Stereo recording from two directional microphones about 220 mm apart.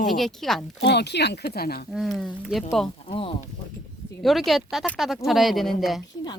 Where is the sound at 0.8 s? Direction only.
50° left (ahead or behind).